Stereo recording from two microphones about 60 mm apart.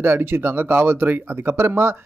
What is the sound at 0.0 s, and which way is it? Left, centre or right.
Speech, right.